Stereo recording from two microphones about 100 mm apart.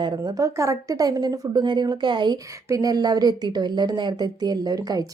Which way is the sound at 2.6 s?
35° right (ahead or behind).